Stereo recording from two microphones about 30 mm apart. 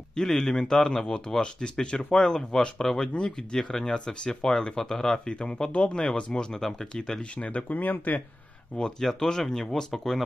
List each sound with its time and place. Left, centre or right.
0.1 s speech: centre
2.8 s speech: centre
3.9 s speech: left
4.4 s speech: centre
5.2 s speech: left
7.3 s speech: left
7.6 s speech: left
8.7 s speech: left
9.0 s speech: centre
9.9 s speech: centre